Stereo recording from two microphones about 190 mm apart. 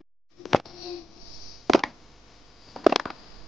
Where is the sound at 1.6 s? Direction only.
Centre (ahead or behind).